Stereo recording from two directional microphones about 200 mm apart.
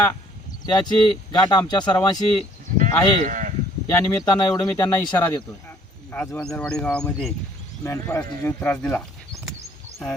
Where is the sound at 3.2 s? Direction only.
40° right (ahead or behind).